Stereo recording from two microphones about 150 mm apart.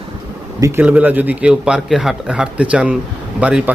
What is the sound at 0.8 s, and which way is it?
A man's voice, 10° right (ahead or behind).